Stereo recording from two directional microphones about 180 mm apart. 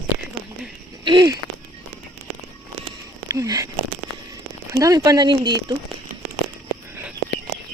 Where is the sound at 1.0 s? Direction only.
25° right (ahead or behind).